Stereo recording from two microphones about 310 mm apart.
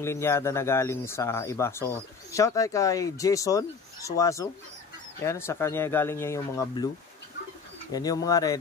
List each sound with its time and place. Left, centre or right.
0.0 s speech: centre
7.9 s speech: centre